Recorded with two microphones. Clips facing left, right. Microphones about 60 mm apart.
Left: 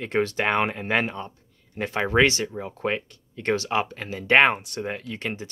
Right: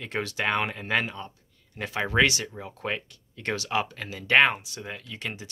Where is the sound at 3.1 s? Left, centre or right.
Left.